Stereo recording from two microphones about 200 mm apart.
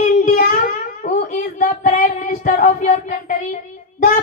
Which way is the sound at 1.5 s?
40° left (ahead or behind).